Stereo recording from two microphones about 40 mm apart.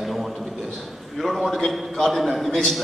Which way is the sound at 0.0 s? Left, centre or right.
Centre.